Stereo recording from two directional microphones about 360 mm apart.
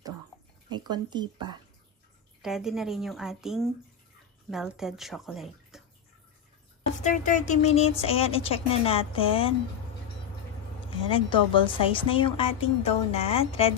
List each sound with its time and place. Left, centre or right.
0.7 s speech: centre
2.4 s a woman's voice: centre
7.0 s a woman's voice: centre
11.0 s a woman's voice: centre